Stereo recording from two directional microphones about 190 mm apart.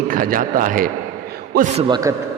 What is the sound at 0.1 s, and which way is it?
A man's voice, 45° right (ahead or behind).